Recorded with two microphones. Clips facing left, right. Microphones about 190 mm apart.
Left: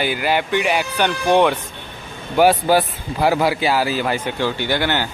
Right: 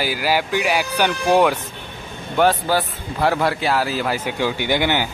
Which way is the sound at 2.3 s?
15° left (ahead or behind).